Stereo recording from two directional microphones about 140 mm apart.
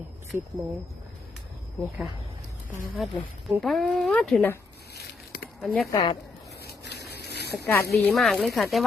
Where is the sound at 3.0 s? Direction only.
Centre (ahead or behind).